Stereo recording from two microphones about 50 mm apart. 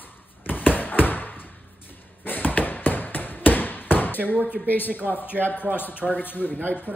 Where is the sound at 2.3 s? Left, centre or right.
Left.